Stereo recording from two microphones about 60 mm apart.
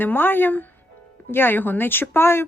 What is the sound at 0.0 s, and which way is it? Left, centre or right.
Speech, left.